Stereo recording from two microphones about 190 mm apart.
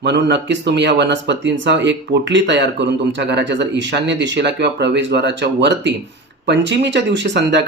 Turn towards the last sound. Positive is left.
turn(degrees=-65)  # may be behind; listen again after turning